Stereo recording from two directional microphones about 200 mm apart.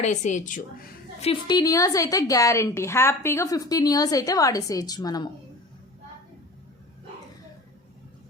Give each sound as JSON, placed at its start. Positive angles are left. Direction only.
{"t": 0.0, "sound": "a woman's voice", "side_deg": 35}
{"t": 1.2, "sound": "a woman's voice", "side_deg": 25}